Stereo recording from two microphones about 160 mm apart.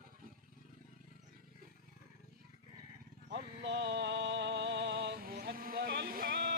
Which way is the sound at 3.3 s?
90° right.